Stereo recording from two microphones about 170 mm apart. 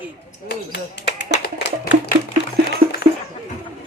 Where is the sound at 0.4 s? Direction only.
90° left; by 2.1 s 65° left (ahead or behind).